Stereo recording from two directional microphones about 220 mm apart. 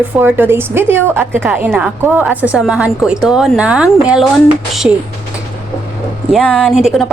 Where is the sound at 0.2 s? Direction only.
10° right (ahead or behind).